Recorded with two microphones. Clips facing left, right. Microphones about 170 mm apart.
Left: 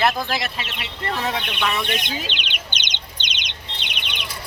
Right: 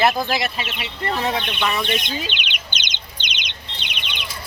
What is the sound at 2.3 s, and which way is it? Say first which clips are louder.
Bird: right 1 dB; 35° left (ahead or behind).